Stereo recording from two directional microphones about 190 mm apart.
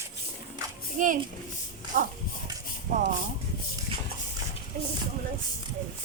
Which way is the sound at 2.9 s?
40° right (ahead or behind).